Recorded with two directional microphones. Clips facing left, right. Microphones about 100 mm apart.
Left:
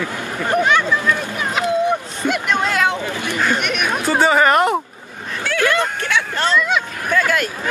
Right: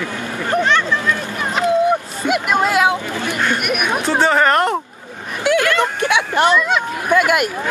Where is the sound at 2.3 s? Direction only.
5° right (ahead or behind).